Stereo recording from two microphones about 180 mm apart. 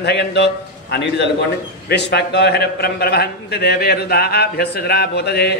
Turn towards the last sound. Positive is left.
turn(degrees=65)  # may be behind; listen again after turning